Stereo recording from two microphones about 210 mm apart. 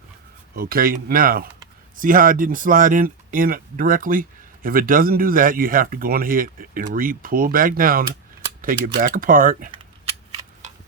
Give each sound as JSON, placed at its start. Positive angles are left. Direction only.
{"t": 0.5, "sound": "speech", "side_deg": -45}